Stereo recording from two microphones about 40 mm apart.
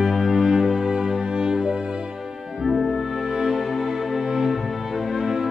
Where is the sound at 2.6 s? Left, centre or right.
Centre.